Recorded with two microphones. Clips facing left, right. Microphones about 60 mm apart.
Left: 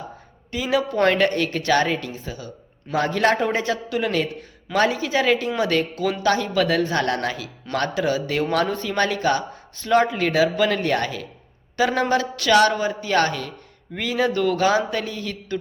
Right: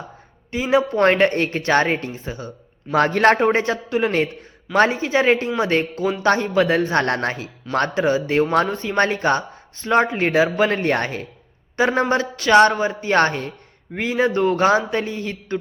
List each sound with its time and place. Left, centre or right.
0.5 s speech: right
2.9 s speech: right
9.0 s speech: right